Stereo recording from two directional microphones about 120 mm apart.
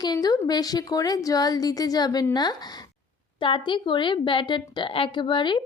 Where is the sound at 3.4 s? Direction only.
45° left (ahead or behind).